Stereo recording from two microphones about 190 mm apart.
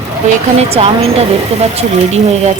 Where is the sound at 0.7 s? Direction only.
30° right (ahead or behind).